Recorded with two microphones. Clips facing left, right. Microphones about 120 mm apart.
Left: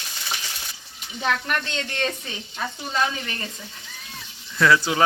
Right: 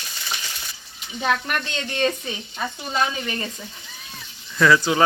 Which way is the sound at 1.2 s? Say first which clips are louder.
Right 1 dB; 15° right (ahead or behind).